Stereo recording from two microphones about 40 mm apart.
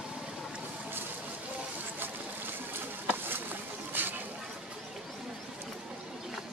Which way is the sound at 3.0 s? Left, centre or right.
Right.